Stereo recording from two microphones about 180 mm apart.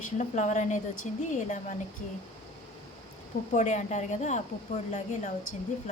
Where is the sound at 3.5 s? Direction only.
40° left (ahead or behind).